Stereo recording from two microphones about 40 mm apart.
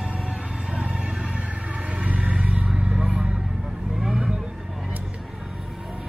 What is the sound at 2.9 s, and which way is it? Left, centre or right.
Vehicle, right.